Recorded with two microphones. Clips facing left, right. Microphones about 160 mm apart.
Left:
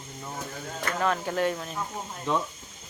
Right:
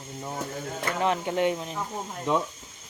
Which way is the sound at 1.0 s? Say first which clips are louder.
Right 2 dB; 20° right (ahead or behind).